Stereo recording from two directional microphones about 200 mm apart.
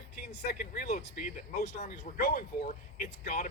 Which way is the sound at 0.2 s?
55° left (ahead or behind).